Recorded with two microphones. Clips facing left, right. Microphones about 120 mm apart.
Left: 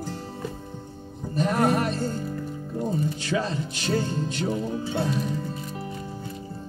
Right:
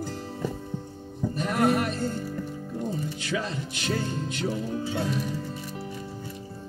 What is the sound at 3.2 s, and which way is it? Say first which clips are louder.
Speech: left 3 dB; 35° left (ahead or behind).